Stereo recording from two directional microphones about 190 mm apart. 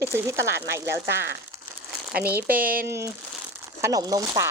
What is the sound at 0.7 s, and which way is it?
Speech, 65° right (ahead or behind).